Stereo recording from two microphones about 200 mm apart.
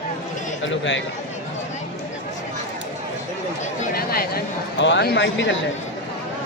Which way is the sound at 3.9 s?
50° left (ahead or behind).